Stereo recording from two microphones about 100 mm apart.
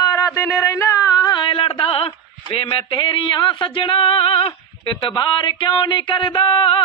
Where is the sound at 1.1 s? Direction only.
45° left (ahead or behind).